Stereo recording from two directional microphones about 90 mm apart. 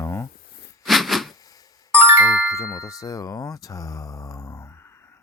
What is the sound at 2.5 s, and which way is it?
Speech, 35° left (ahead or behind).